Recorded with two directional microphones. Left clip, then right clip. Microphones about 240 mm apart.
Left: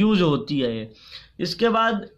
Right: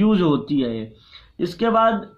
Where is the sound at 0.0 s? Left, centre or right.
Left.